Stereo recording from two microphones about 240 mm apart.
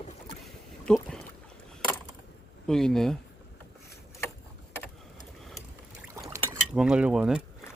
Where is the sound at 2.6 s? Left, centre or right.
Centre.